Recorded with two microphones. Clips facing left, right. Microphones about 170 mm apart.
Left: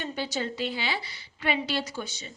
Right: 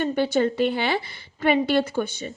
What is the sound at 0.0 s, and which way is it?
A woman's voice, 55° right (ahead or behind).